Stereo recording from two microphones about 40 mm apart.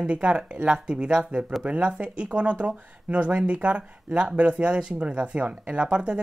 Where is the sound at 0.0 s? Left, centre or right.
Right.